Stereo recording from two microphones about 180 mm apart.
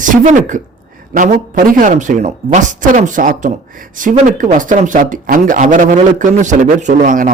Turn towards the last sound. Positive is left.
turn(degrees=-45)  # may be behind; listen again after turning